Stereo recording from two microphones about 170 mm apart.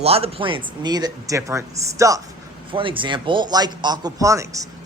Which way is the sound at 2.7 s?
30° right (ahead or behind).